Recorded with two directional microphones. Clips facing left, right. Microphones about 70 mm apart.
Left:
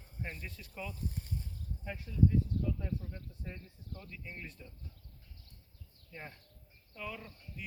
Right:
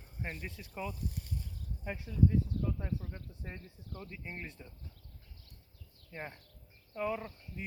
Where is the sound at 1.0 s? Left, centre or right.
Left.